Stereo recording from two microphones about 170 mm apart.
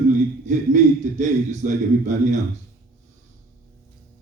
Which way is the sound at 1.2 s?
45° right (ahead or behind).